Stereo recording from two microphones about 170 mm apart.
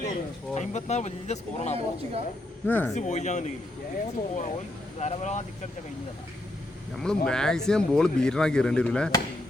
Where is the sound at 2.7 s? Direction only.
10° left (ahead or behind).